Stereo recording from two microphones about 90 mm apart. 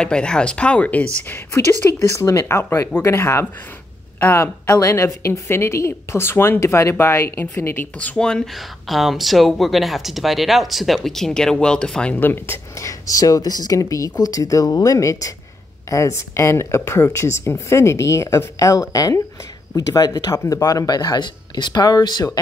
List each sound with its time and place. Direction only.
0.0 s speech: 10° left (ahead or behind)
1.5 s speech: 30° left (ahead or behind)
4.6 s a woman's voice: 35° left (ahead or behind); by 22.4 s 50° left (ahead or behind)